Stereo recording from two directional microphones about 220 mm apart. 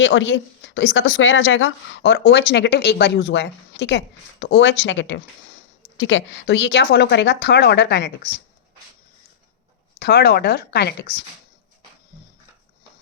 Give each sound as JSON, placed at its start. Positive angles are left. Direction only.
{"t": 0.0, "sound": "a woman's voice", "side_deg": 55}
{"t": 10.0, "sound": "a woman's voice", "side_deg": 50}